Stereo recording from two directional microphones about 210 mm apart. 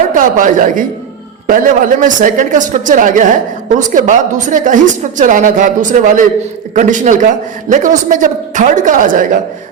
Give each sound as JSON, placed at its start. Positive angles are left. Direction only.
{"t": 0.1, "sound": "a woman's voice", "side_deg": -40}